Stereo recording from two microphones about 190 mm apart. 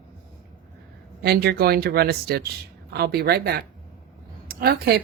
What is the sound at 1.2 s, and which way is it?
Speech, 55° right (ahead or behind).